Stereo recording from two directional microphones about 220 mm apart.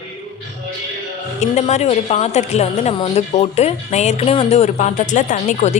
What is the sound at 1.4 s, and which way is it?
A woman's voice, 30° left (ahead or behind).